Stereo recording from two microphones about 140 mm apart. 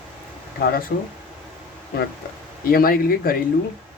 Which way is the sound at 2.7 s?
90° left.